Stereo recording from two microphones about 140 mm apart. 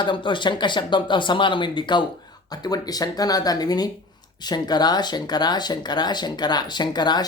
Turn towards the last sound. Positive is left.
turn(degrees=30)  # may be behind; listen again after turning